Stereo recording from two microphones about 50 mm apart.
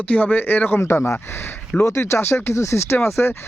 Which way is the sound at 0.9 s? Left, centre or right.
Left.